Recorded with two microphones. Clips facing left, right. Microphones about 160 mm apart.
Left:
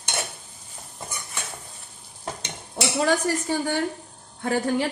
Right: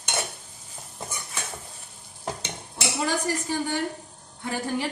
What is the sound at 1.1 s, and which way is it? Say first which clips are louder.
Stir: left 1 dB; 10° right (ahead or behind).